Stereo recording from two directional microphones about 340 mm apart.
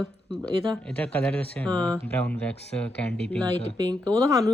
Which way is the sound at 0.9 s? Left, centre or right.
Centre.